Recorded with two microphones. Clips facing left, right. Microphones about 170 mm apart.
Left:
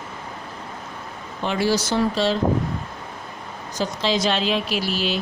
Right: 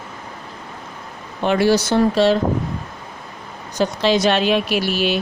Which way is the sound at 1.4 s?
60° right (ahead or behind).